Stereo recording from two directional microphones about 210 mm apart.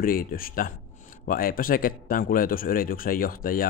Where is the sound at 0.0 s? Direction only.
45° left (ahead or behind).